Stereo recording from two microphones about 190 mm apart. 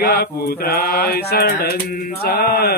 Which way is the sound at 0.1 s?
55° left (ahead or behind).